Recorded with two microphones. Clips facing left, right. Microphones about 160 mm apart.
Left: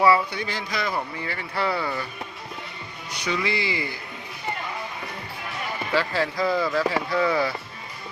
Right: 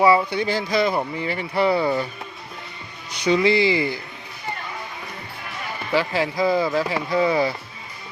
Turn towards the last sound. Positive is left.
turn(degrees=-20)  # may be behind; listen again after turning